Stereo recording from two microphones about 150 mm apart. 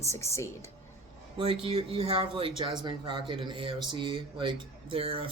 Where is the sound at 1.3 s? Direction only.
35° right (ahead or behind).